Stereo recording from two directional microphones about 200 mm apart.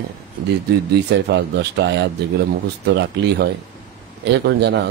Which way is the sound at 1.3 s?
55° right (ahead or behind).